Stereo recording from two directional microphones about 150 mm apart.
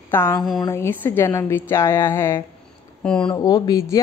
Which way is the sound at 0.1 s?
15° left (ahead or behind).